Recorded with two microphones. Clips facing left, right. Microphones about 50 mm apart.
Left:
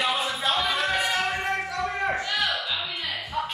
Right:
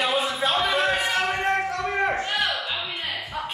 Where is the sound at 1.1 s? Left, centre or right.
Right.